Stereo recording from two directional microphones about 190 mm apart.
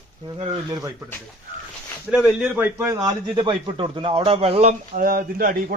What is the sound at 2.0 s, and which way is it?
A man's voice, 5° right (ahead or behind).